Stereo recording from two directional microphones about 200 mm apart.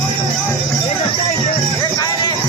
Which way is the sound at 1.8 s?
20° left (ahead or behind).